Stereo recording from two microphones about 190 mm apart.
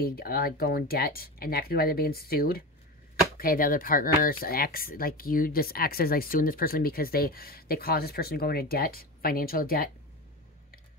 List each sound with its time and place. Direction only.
0.0 s speech: 55° left (ahead or behind)